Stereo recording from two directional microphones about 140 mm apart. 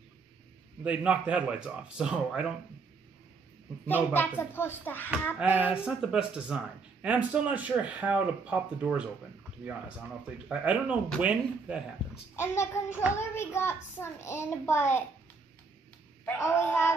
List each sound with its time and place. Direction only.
0.8 s speech: 10° right (ahead or behind)
3.8 s a child's voice: 15° left (ahead or behind)
5.4 s speech: 10° right (ahead or behind)
10.5 s speech: 10° right (ahead or behind)
12.4 s a child's voice: 20° left (ahead or behind)
16.3 s a child's voice: 15° left (ahead or behind)